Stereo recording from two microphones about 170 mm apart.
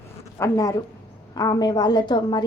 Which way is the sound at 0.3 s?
20° left (ahead or behind).